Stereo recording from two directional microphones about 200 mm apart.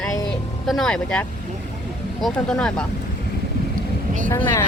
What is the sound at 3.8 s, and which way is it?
Vehicle, 40° right (ahead or behind).